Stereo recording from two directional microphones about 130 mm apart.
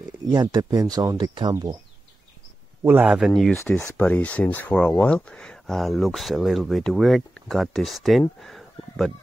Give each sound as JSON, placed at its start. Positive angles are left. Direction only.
{"t": 0.3, "sound": "speech", "side_deg": -30}
{"t": 2.8, "sound": "speech", "side_deg": -10}
{"t": 8.4, "sound": "a sound", "side_deg": 0}